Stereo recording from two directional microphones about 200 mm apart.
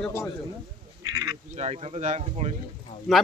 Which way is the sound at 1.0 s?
15° right (ahead or behind).